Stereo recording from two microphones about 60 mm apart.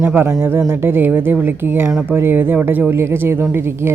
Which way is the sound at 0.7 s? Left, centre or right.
Right.